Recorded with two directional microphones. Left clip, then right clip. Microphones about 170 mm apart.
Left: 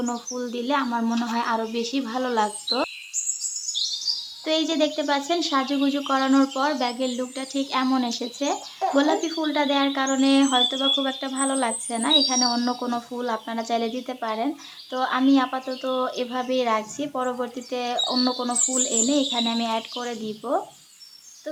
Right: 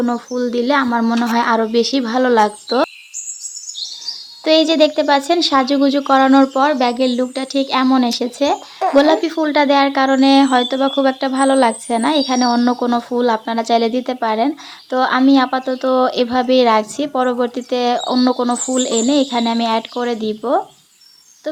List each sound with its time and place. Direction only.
0.0 s speech: 35° right (ahead or behind)
4.4 s speech: 40° right (ahead or behind)